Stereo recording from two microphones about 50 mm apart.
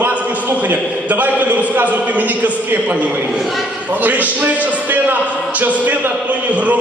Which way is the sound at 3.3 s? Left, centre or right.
Centre.